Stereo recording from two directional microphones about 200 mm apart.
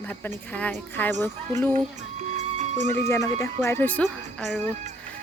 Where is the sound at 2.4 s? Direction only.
35° right (ahead or behind).